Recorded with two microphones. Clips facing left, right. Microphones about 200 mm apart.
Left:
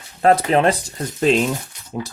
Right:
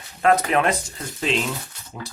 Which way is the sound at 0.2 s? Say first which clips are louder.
Left 4 dB; 30° left (ahead or behind).